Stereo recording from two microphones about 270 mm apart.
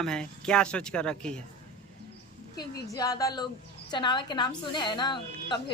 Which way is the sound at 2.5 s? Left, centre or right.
Centre.